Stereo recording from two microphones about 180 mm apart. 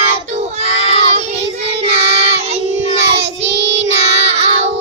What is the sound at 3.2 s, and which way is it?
Child singing, 80° right.